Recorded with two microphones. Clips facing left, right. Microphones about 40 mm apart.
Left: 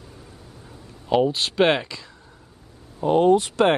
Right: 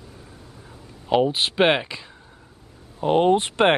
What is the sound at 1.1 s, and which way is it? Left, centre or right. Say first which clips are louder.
Speech: even; centre.